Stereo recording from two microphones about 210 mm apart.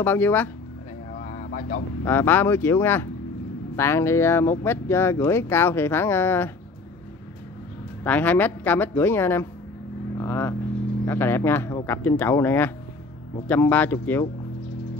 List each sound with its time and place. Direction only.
0.0 s speech: 10° left (ahead or behind)
1.2 s a sound: 45° left (ahead or behind)
2.0 s speech: 10° left (ahead or behind)
8.0 s speech: 10° left (ahead or behind)